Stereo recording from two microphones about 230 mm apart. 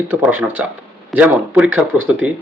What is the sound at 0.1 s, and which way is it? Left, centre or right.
A man's voice, centre.